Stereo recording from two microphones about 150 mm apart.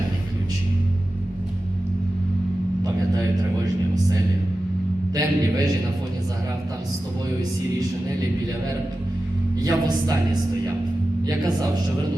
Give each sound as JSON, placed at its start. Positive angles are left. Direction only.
{"t": 5.1, "sound": "a sound", "side_deg": -25}
{"t": 9.6, "sound": "speech", "side_deg": -25}
{"t": 11.3, "sound": "speech", "side_deg": -25}